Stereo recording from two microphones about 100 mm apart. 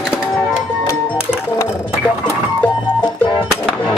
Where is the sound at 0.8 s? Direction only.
30° left (ahead or behind).